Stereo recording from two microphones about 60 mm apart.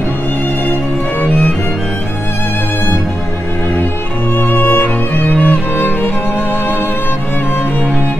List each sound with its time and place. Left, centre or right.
4.4 s music: left